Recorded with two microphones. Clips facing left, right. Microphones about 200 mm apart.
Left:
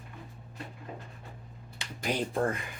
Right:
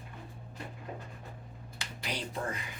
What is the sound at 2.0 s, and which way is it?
Speech, 50° left (ahead or behind).